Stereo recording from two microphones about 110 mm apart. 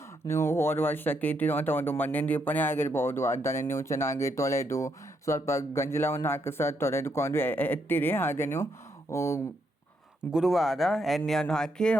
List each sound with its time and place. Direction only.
0.3 s speech: 25° left (ahead or behind)
10.3 s speech: 5° right (ahead or behind)